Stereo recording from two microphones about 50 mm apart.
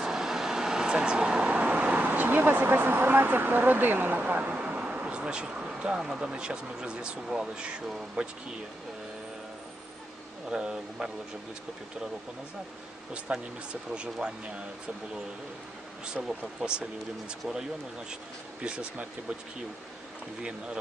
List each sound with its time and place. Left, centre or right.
0.0 s vehicle: centre; by 4.5 s right
4.5 s speech: right
10.5 s speech: centre
13.3 s speech: right
16.2 s speech: centre
16.6 s speech: centre
18.6 s speech: centre